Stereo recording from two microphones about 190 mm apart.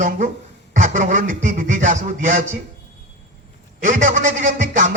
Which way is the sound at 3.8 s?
40° right (ahead or behind).